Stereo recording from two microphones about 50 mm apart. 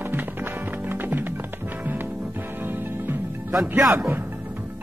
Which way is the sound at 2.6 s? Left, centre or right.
Right.